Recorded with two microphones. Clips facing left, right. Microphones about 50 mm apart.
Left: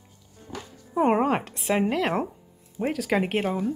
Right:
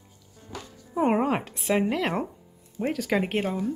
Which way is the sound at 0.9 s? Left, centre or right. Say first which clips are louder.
Left 2 dB; centre.